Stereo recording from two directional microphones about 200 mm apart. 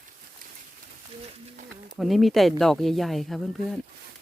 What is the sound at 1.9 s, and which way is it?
Speech, centre (ahead or behind).